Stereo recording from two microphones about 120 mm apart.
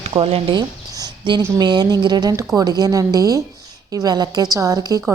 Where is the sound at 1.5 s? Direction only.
35° right (ahead or behind).